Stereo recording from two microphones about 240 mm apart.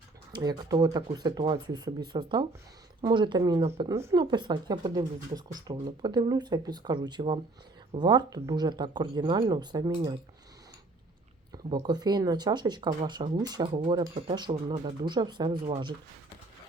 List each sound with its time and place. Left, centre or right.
0.3 s speech: centre
11.5 s speech: centre